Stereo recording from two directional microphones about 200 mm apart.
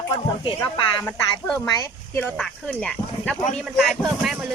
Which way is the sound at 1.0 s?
15° left (ahead or behind).